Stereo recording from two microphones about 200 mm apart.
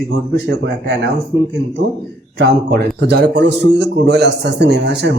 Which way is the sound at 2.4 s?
55° right (ahead or behind).